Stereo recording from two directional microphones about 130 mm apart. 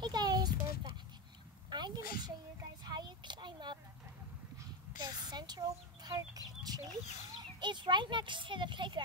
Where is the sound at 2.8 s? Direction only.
35° right (ahead or behind).